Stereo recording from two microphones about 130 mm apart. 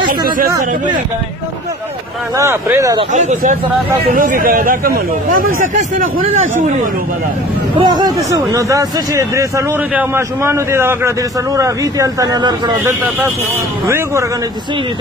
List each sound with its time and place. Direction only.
2.3 s a man's voice: 25° right (ahead or behind)
3.1 s speech: 65° right (ahead or behind)
4.1 s speech: 90° right
7.7 s speech: 35° right (ahead or behind)
8.3 s a man's voice: 25° right (ahead or behind)
13.8 s a man's voice: 20° right (ahead or behind)